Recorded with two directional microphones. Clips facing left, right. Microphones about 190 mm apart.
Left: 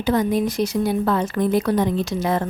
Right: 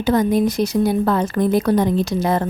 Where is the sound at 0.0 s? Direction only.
40° right (ahead or behind).